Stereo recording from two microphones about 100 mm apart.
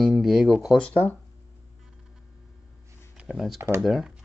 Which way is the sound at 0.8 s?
15° left (ahead or behind).